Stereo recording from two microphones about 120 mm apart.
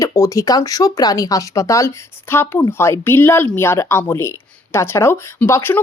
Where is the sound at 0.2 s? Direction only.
30° left (ahead or behind).